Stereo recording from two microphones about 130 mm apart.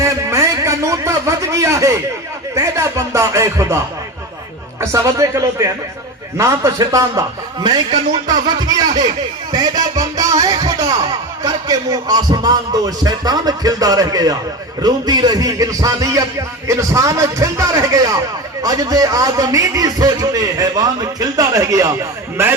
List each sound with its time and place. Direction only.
0.0 s a sound: 20° right (ahead or behind)
2.6 s music: 25° right (ahead or behind)
4.8 s music: 25° right (ahead or behind)